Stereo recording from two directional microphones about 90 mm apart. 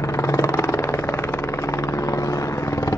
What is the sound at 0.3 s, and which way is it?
Vehicle, 35° left (ahead or behind).